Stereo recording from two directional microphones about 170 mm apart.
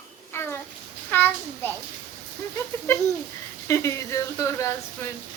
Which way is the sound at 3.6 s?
15° left (ahead or behind).